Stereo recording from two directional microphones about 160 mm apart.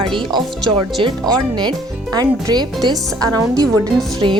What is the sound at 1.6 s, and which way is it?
Speech, 25° right (ahead or behind).